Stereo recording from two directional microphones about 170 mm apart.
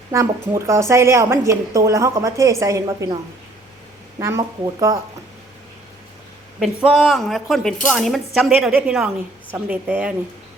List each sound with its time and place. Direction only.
0.1 s a woman's voice: 15° right (ahead or behind)
4.2 s speech: 15° right (ahead or behind)
6.6 s a woman's voice: centre (ahead or behind)